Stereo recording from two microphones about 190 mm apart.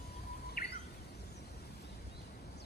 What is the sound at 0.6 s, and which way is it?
Bird, 50° left (ahead or behind).